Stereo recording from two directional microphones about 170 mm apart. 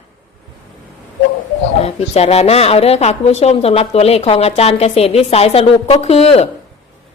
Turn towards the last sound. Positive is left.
turn(degrees=35)  # may be behind; listen again after turning